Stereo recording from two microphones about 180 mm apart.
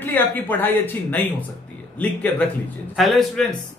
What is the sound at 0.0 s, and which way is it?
A man's voice, 10° left (ahead or behind).